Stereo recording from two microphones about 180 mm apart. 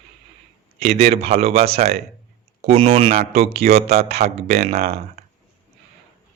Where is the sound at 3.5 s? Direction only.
60° right (ahead or behind).